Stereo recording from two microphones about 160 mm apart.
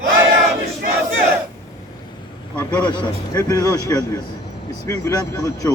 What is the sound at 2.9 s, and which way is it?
A man's voice, 25° left (ahead or behind).